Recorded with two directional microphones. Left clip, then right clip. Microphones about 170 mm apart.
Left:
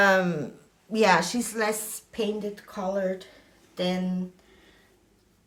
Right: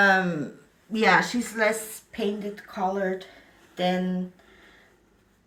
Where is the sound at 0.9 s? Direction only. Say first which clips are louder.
Right 1 dB; 45° left (ahead or behind).